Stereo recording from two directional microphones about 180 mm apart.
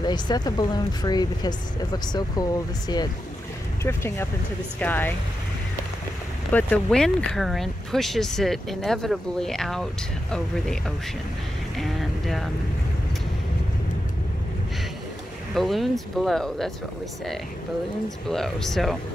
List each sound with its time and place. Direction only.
0.0 s speech: 25° left (ahead or behind)
3.8 s speech: 15° left (ahead or behind)
6.5 s speech: 5° left (ahead or behind)
15.5 s speech: centre (ahead or behind)
18.3 s speech: centre (ahead or behind)